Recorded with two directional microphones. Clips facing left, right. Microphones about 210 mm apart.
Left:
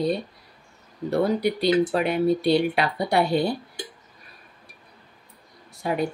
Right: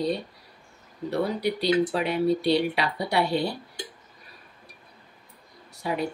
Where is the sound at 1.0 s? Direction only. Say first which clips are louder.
Left 4 dB; 50° left (ahead or behind).